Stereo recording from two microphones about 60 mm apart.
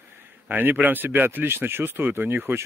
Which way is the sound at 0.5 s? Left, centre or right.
Right.